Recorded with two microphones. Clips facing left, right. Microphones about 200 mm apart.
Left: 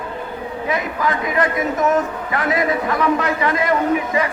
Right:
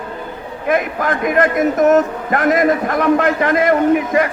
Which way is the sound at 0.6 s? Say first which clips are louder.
Right 5 dB; 50° right (ahead or behind).